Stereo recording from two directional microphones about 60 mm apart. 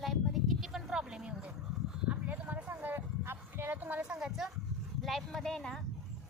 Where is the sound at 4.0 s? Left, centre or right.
Centre.